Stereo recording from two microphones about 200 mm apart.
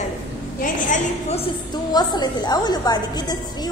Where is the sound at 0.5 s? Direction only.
40° left (ahead or behind).